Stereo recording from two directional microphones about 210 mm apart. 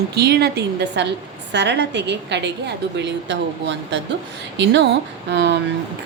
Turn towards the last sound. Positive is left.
turn(degrees=-55)  # may be behind; listen again after turning